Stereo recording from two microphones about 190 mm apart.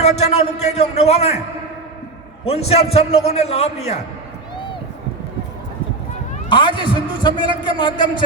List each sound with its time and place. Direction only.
0.2 s a man's voice: 35° left (ahead or behind)
2.4 s a man's voice: 30° left (ahead or behind)
6.5 s a man's voice: 25° left (ahead or behind)